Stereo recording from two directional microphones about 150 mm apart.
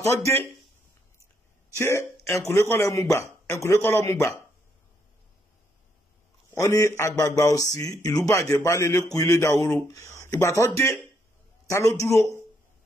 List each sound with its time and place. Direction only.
0.0 s speech: 20° left (ahead or behind)
1.8 s speech: 15° left (ahead or behind)
6.5 s speech: 20° left (ahead or behind)
11.7 s speech: 20° left (ahead or behind)